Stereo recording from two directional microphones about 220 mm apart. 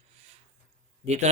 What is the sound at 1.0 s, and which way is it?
Speech, 30° right (ahead or behind).